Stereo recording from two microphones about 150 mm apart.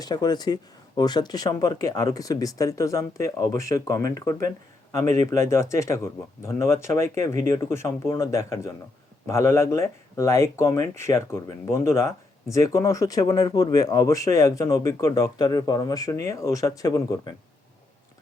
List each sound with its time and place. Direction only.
0.0 s speech: 25° left (ahead or behind)